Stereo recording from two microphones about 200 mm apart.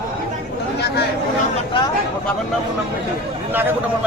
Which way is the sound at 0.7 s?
55° left (ahead or behind).